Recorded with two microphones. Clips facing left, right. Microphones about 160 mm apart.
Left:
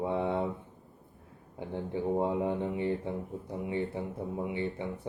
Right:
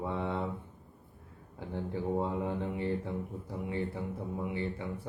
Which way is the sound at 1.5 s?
20° left (ahead or behind).